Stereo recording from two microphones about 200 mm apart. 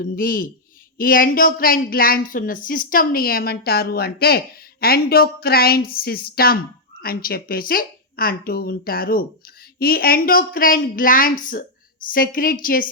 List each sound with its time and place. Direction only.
0.0 s speech: 45° left (ahead or behind)